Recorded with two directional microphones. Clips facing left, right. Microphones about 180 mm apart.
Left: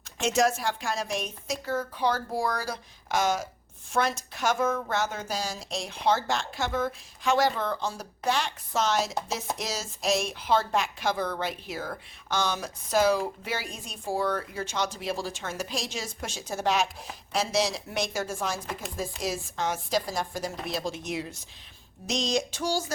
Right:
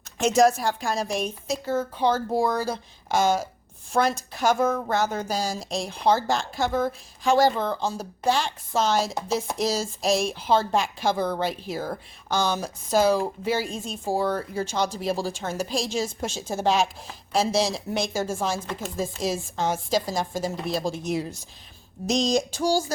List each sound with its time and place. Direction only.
0.2 s a woman's voice: 40° right (ahead or behind)
18.6 s speech: 5° left (ahead or behind)
19.2 s a woman's voice: 30° right (ahead or behind)